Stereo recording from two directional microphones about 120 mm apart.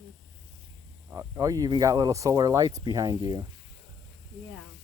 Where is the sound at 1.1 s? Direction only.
25° right (ahead or behind).